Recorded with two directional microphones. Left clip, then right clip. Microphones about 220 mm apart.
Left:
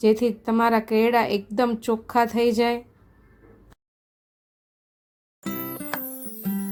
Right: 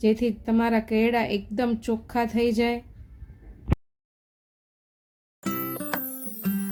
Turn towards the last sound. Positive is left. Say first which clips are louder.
# even
turn(degrees=0)  # may be behind; listen again after turning